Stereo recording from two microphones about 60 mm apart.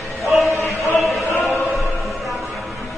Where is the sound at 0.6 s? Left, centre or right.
Right.